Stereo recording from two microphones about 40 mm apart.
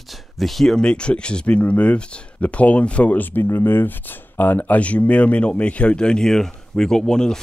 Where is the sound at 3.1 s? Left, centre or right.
Left.